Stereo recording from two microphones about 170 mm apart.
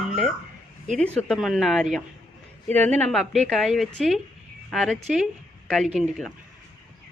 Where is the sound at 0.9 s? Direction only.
5° left (ahead or behind).